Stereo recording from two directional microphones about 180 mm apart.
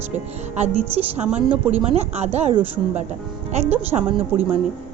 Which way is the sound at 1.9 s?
35° right (ahead or behind).